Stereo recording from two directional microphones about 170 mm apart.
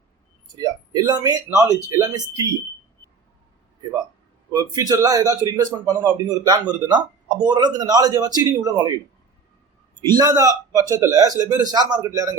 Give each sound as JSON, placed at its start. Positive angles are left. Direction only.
{"t": 0.5, "sound": "a man's voice", "side_deg": -20}
{"t": 4.5, "sound": "a man's voice", "side_deg": -20}
{"t": 10.0, "sound": "a man's voice", "side_deg": -25}